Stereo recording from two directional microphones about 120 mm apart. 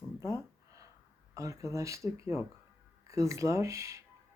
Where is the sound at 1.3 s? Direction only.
25° right (ahead or behind).